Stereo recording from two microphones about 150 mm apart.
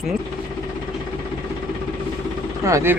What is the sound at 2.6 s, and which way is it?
Speech, 20° right (ahead or behind).